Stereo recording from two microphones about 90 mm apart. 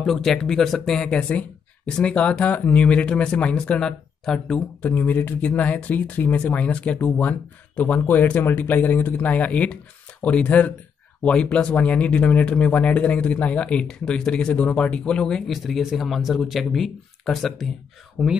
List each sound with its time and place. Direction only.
0.0 s speech: 5° left (ahead or behind)
4.8 s speech: 20° left (ahead or behind); by 17.6 s centre (ahead or behind)
18.2 s speech: 10° right (ahead or behind)